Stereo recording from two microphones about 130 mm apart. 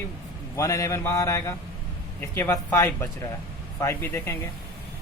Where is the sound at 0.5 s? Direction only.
25° left (ahead or behind).